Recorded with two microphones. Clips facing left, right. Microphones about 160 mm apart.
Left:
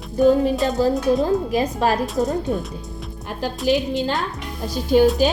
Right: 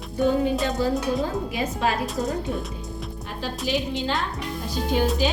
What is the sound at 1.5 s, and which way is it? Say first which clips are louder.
Speech: left 5 dB; 40° left (ahead or behind).